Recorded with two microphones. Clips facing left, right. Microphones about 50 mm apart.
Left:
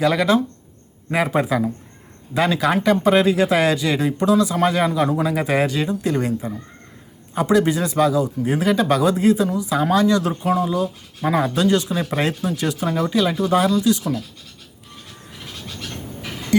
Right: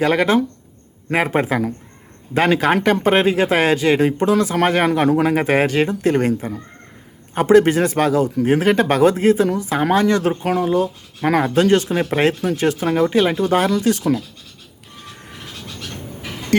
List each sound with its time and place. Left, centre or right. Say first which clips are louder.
0.0 s speech: right 1 dB; right